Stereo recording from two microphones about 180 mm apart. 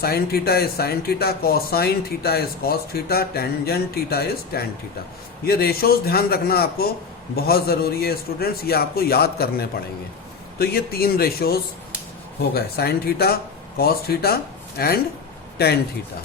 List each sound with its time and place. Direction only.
0.0 s speech: 60° left (ahead or behind)